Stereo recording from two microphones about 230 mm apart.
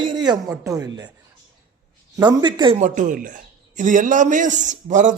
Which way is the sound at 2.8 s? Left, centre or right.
Right.